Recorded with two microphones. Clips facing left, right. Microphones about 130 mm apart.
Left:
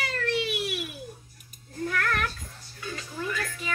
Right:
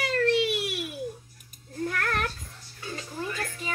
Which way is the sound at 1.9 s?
35° right (ahead or behind).